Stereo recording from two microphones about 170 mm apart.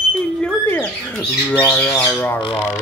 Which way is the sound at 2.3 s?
30° left (ahead or behind).